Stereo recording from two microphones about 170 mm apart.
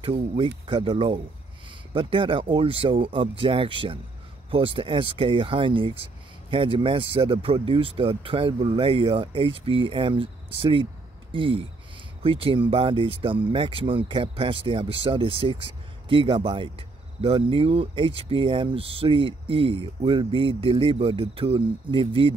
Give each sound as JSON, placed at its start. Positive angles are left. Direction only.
{"t": 0.0, "sound": "speech", "side_deg": -30}